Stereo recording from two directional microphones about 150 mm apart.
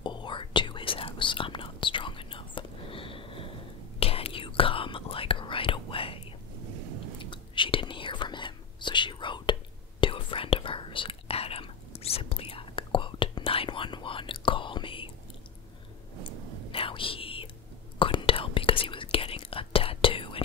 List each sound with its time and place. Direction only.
0.0 s whispering: 30° left (ahead or behind)
7.2 s whispering: 35° left (ahead or behind)
16.7 s whispering: 35° left (ahead or behind)